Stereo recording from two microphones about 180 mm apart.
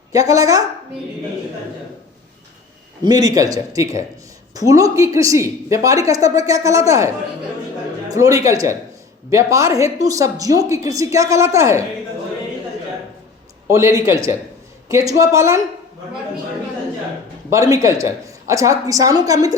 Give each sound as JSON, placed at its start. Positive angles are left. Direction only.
{"t": 0.1, "sound": "a woman's voice", "side_deg": -20}
{"t": 3.0, "sound": "a woman's voice", "side_deg": -20}
{"t": 8.1, "sound": "a woman's voice", "side_deg": -20}
{"t": 13.7, "sound": "speech", "side_deg": -15}
{"t": 17.5, "sound": "a woman's voice", "side_deg": -20}